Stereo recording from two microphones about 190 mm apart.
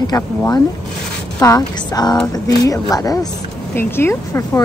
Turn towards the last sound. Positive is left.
turn(degrees=15)  # may be behind; listen again after turning